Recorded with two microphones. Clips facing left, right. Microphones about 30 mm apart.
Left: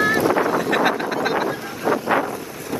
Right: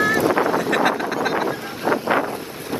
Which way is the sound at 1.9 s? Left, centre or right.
Right.